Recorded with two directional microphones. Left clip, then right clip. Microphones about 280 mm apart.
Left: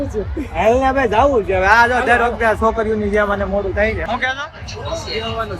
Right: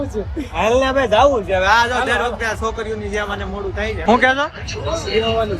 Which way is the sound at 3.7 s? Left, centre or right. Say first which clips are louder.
Right 2 dB; centre.